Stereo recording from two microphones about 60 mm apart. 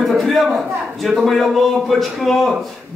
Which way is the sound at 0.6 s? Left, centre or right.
Centre.